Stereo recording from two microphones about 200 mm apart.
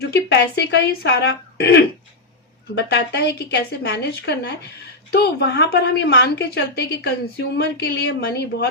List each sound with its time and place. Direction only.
0.1 s a woman's voice: 55° left (ahead or behind)